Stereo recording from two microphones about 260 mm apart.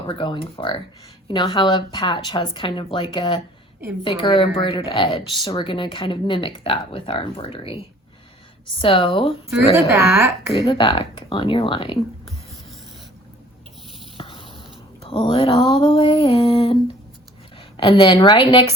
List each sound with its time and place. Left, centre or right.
0.1 s a woman's voice: centre
8.8 s a woman's voice: centre
9.7 s speech: centre
10.7 s a woman's voice: centre
14.2 s a sound: centre
15.0 s a woman's voice: centre
17.7 s a woman's voice: centre